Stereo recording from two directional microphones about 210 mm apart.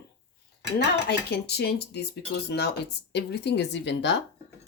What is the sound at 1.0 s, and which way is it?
Speech, 50° left (ahead or behind).